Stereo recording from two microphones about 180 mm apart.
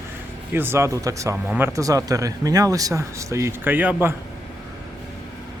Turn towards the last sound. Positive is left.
turn(degrees=-10)  # may be behind; listen again after turning